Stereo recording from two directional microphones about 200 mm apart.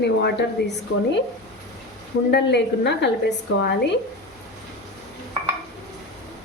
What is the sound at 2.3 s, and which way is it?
A woman's voice, 60° left (ahead or behind).